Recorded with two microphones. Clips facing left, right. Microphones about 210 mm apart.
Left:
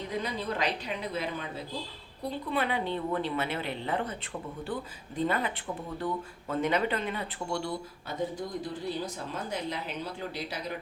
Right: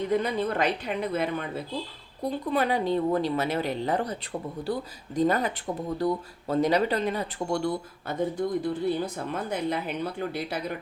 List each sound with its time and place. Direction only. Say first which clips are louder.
0.2 s a woman's voice: right 5 dB; 55° right (ahead or behind)
2.5 s a woman's voice: right 5 dB; 40° right (ahead or behind)